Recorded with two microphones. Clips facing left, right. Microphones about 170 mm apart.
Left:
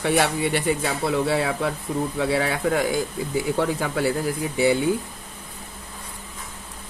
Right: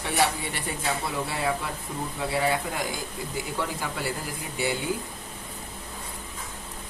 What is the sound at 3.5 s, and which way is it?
Speech, 55° left (ahead or behind).